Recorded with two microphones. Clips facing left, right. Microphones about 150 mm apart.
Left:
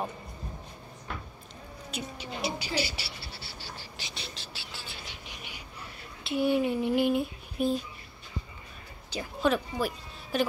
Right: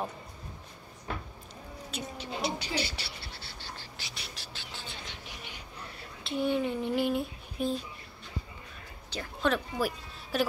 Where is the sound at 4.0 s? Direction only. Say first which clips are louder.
Left 3 dB; 25° left (ahead or behind).